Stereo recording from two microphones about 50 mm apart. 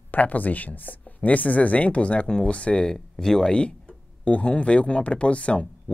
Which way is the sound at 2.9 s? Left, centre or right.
Centre.